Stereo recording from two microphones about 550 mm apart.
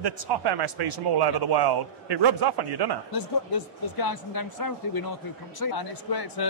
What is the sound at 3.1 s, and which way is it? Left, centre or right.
A man's voice, left.